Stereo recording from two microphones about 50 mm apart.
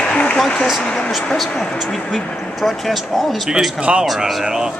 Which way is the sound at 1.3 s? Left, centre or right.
Centre.